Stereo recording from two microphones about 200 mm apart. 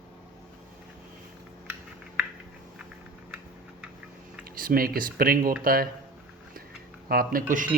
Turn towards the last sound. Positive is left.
turn(degrees=-45)  # may be behind; listen again after turning